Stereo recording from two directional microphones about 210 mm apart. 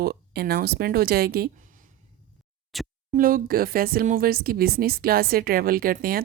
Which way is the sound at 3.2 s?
40° right (ahead or behind).